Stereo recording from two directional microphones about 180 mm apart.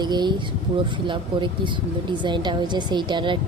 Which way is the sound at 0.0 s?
25° right (ahead or behind).